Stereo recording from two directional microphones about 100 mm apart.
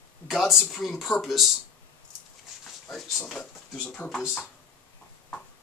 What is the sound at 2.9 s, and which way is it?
Speech, centre (ahead or behind).